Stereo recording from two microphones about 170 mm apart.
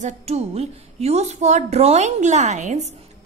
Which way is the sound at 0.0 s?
40° right (ahead or behind).